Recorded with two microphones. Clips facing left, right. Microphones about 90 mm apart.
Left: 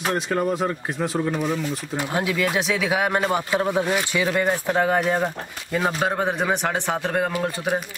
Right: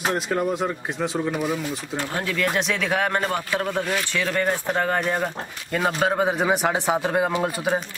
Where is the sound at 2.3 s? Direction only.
5° left (ahead or behind).